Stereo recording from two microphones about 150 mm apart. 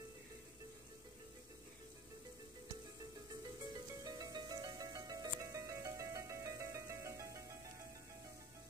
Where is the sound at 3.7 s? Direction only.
25° right (ahead or behind).